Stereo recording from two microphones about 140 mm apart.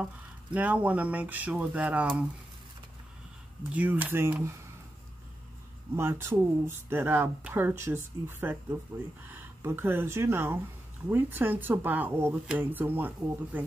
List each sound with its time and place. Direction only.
0.0 s speech: 10° right (ahead or behind)
3.7 s speech: 10° right (ahead or behind)
5.9 s speech: 15° right (ahead or behind)